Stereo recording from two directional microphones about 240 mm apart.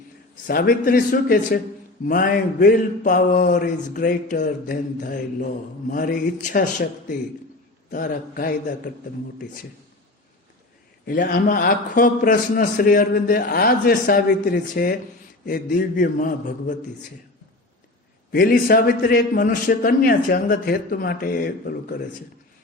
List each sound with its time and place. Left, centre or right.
0.4 s a man's voice: left
11.0 s a man's voice: left
18.3 s a man's voice: left